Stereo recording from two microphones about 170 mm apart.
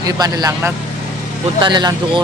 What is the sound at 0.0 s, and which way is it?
Speech, 20° right (ahead or behind).